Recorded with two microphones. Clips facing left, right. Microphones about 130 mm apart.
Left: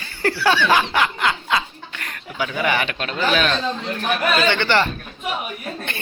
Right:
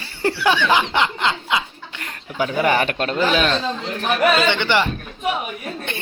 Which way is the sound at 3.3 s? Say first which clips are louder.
Right 1 dB; 25° right (ahead or behind).